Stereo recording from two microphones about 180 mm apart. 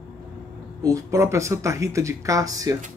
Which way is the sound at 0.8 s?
15° right (ahead or behind).